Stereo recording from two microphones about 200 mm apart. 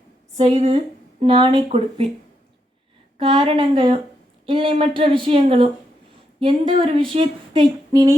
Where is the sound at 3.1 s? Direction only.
25° right (ahead or behind).